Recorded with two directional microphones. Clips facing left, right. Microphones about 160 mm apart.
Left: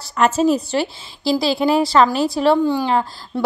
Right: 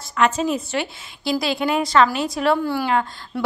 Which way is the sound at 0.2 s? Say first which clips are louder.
Left 4 dB; 40° left (ahead or behind).